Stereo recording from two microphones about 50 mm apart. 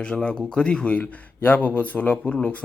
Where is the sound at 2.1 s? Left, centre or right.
Left.